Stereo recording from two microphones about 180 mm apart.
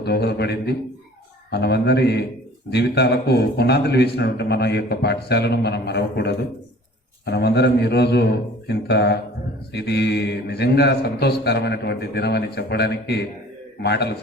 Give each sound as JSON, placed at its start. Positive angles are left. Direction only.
{"t": 0.0, "sound": "a man's voice", "side_deg": 65}